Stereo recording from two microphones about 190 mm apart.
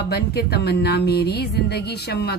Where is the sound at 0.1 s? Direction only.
60° left (ahead or behind).